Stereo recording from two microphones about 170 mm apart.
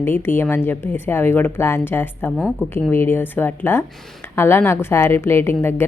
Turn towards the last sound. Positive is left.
turn(degrees=15)  # may be behind; listen again after turning